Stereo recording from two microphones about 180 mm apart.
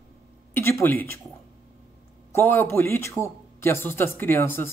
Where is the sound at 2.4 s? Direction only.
15° left (ahead or behind).